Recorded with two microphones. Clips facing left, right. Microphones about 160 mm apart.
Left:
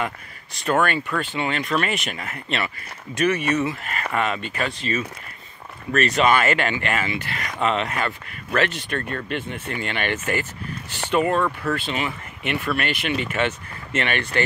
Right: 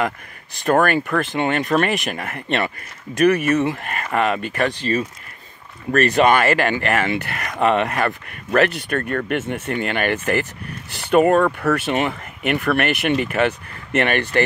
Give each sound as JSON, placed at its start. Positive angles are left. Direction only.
{"t": 0.7, "sound": "speech", "side_deg": -40}
{"t": 0.9, "sound": "speech", "side_deg": -55}
{"t": 5.9, "sound": "speech", "side_deg": -50}
{"t": 7.0, "sound": "speech", "side_deg": -60}
{"t": 11.1, "sound": "speech", "side_deg": -50}
{"t": 11.8, "sound": "speech", "side_deg": -60}
{"t": 13.2, "sound": "speech", "side_deg": -40}